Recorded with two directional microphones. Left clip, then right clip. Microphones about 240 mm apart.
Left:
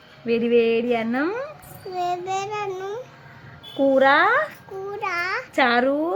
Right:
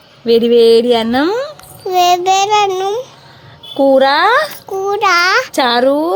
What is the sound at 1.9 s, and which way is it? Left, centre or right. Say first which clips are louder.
A child's voice: right 15 dB; right.